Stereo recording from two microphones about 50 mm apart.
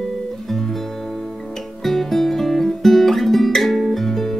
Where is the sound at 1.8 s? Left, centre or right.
Centre.